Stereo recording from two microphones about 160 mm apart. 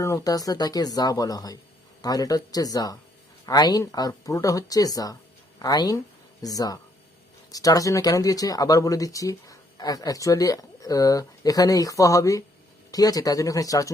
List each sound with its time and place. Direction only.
0.0 s speech: 20° left (ahead or behind)